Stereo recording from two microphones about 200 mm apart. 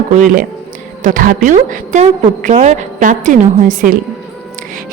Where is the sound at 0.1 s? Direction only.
40° right (ahead or behind).